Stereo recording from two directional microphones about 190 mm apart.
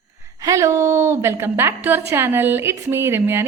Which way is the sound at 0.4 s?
15° right (ahead or behind).